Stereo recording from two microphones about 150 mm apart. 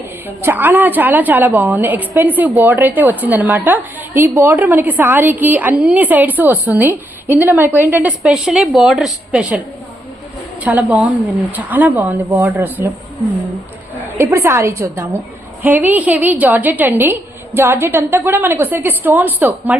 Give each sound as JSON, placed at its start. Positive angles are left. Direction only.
{"t": 0.3, "sound": "a woman's voice", "side_deg": -15}
{"t": 10.6, "sound": "a woman's voice", "side_deg": -10}
{"t": 14.2, "sound": "a woman's voice", "side_deg": -20}